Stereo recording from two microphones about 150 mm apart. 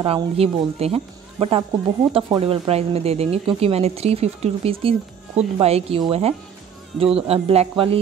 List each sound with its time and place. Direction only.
0.0 s speech: 40° right (ahead or behind)